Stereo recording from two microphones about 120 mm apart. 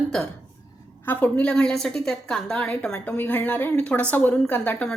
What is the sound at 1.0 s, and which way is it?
A woman's voice, 15° left (ahead or behind).